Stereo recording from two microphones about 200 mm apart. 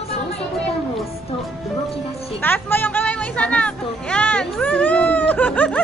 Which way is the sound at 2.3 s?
10° left (ahead or behind).